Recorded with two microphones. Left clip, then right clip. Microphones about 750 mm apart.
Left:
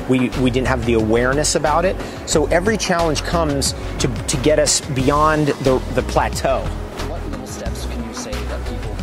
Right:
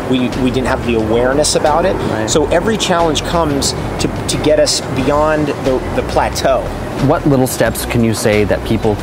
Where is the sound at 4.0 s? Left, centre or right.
Left.